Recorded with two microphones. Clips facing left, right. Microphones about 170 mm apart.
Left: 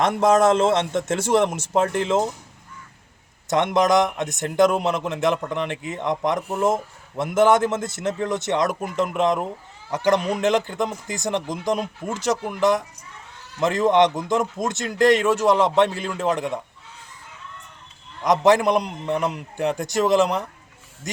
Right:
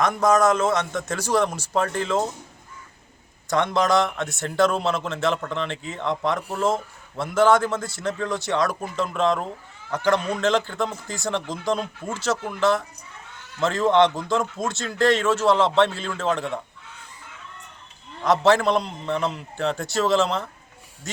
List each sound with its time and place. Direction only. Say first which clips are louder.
0.0 s a man's voice: left 2 dB; 25° left (ahead or behind)
3.4 s a man's voice: left 2 dB; 20° left (ahead or behind)
18.2 s a man's voice: left 1 dB; 15° left (ahead or behind)